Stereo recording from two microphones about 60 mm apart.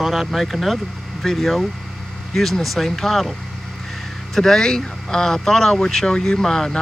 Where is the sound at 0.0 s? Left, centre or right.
Centre.